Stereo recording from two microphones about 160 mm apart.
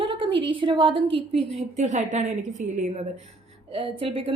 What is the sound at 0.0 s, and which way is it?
A woman's voice, 35° right (ahead or behind).